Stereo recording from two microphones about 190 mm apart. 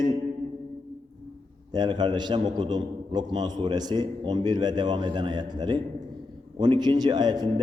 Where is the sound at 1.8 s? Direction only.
25° right (ahead or behind).